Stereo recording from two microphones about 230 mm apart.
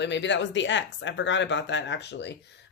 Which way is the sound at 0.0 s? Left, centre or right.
Left.